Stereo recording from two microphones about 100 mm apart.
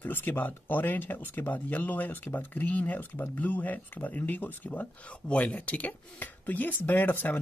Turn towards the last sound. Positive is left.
turn(degrees=20)  # may be behind; listen again after turning